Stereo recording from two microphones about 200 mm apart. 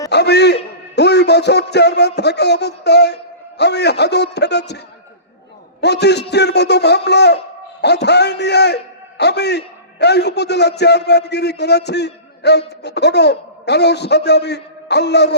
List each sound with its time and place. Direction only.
0.1 s a man's voice: 55° left (ahead or behind)
5.8 s a man's voice: 60° left (ahead or behind)